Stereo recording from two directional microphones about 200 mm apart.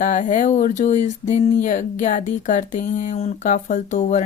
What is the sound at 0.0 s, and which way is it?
Speech, 40° left (ahead or behind).